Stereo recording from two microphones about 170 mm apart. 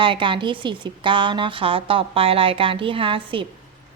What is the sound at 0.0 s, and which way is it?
A woman's voice, 30° right (ahead or behind).